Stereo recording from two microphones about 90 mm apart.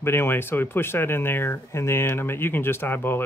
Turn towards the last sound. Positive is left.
turn(degrees=25)  # may be behind; listen again after turning